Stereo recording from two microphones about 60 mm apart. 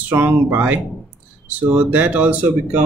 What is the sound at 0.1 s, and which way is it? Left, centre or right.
Speech, right.